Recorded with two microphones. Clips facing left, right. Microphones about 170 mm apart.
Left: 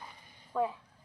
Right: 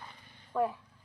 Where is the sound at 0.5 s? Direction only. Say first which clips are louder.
Right 1 dB; 5° right (ahead or behind).